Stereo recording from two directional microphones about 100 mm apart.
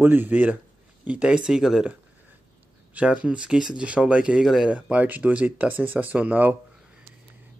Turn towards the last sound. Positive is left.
turn(degrees=-15)  # may be behind; listen again after turning